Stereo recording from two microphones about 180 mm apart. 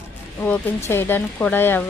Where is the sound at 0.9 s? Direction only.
10° left (ahead or behind).